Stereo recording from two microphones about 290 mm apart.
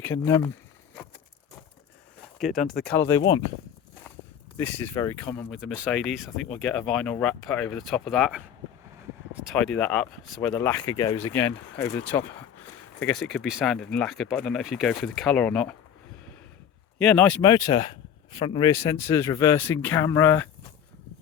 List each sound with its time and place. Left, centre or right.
0.0 s speech: centre
2.4 s speech: centre
4.5 s speech: centre
17.0 s speech: centre